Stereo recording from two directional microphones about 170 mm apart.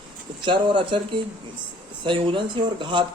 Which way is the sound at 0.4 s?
30° right (ahead or behind).